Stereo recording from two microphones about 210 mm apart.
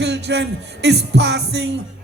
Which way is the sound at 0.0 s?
55° right (ahead or behind).